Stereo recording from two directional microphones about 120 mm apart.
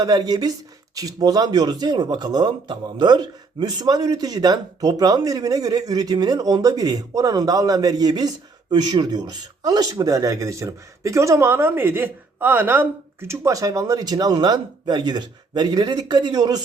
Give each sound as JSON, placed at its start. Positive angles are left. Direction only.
{"t": 0.0, "sound": "a man's voice", "side_deg": -35}